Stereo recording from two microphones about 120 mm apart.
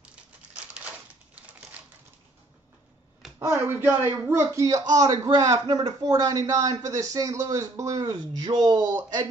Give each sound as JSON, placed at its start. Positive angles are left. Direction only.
{"t": 3.3, "sound": "speech", "side_deg": -20}